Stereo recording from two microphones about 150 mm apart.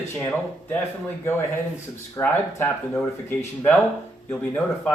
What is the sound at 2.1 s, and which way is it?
Speech, 15° left (ahead or behind).